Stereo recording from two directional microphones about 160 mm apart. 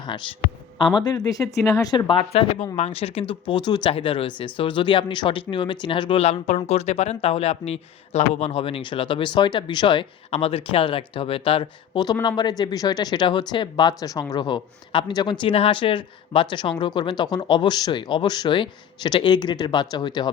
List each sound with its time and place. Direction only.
0.9 s speech: 25° left (ahead or behind)